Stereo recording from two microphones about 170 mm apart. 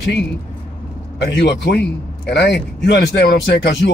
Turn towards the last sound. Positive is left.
turn(degrees=70)  # may be behind; listen again after turning